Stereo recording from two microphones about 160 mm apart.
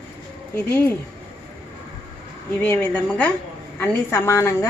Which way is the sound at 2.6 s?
10° left (ahead or behind).